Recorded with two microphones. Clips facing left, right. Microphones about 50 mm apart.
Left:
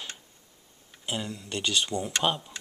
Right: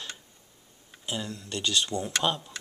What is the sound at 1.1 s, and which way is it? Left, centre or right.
Speech, centre.